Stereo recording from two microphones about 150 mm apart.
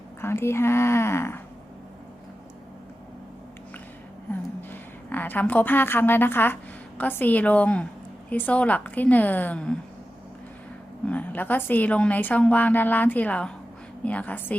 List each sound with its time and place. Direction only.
0.2 s a woman's voice: 15° left (ahead or behind)
4.7 s a woman's voice: 10° left (ahead or behind)
11.0 s a woman's voice: 10° left (ahead or behind)